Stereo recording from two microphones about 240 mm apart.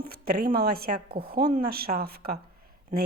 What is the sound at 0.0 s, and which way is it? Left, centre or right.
A woman's voice, right.